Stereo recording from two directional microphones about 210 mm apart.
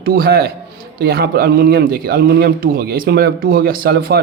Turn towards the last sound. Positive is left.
turn(degrees=-45)  # may be behind; listen again after turning